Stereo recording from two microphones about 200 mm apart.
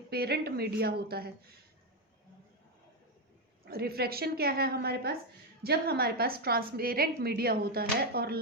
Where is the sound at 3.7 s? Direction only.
50° right (ahead or behind).